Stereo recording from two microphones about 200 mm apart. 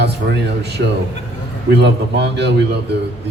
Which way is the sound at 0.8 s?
60° right (ahead or behind).